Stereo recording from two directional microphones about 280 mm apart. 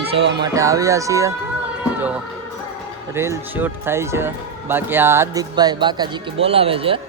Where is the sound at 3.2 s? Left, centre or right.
Centre.